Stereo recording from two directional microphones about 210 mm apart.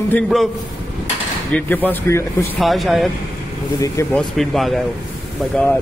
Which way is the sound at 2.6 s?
Centre (ahead or behind).